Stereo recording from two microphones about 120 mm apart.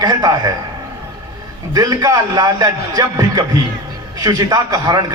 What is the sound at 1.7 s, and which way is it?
A man's voice, 30° right (ahead or behind).